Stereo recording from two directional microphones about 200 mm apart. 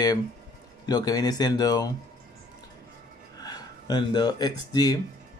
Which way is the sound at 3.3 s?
20° left (ahead or behind).